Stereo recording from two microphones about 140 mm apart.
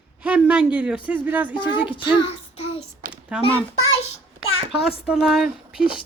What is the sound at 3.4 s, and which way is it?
Speech, 40° left (ahead or behind).